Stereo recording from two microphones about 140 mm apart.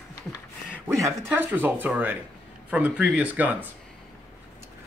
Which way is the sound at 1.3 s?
15° right (ahead or behind).